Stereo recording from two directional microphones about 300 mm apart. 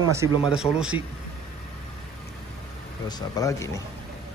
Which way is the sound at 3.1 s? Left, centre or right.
Centre.